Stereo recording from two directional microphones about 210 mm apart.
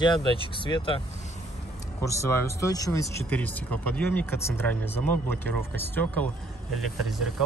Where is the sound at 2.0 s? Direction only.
15° left (ahead or behind).